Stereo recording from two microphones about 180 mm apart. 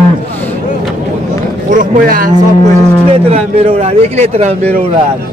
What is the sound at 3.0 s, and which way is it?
Speech, 35° right (ahead or behind).